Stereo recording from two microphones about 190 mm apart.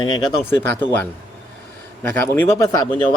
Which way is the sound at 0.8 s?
10° left (ahead or behind).